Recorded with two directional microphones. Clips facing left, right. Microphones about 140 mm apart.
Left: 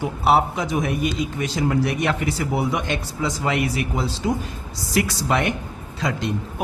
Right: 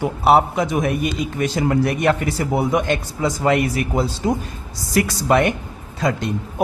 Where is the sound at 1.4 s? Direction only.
55° right (ahead or behind).